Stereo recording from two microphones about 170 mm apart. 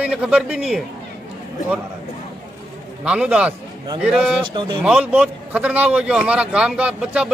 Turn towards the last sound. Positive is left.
turn(degrees=-5)  # may be behind; listen again after turning